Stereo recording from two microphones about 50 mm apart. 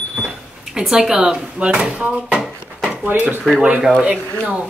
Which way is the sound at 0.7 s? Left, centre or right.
Centre.